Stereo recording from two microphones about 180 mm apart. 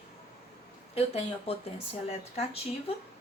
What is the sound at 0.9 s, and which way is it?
Speech, 35° left (ahead or behind).